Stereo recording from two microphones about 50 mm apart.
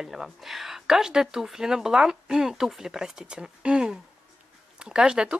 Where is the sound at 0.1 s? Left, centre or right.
Centre.